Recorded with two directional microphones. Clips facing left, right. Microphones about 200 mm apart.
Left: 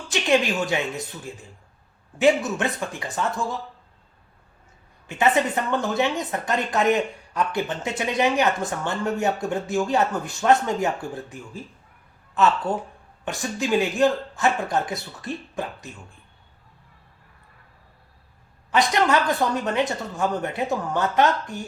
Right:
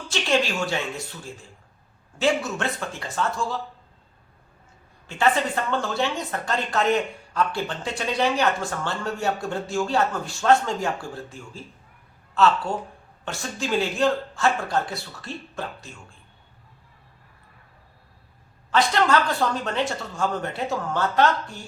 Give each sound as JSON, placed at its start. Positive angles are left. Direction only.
{"t": 0.1, "sound": "speech", "side_deg": 15}
{"t": 5.0, "sound": "a woman's voice", "side_deg": 20}
{"t": 18.7, "sound": "speech", "side_deg": 15}